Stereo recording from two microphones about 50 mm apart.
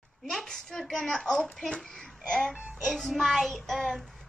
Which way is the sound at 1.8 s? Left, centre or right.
Centre.